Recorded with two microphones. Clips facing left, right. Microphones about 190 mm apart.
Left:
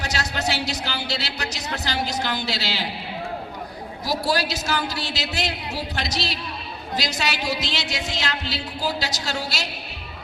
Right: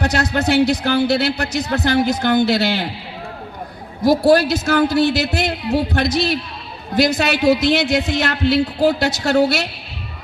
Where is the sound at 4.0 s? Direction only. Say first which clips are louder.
Right 12 dB; 55° right (ahead or behind).